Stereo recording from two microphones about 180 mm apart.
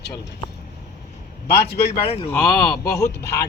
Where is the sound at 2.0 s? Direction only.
30° left (ahead or behind).